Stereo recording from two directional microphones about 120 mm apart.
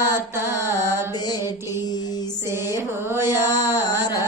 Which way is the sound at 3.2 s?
35° left (ahead or behind).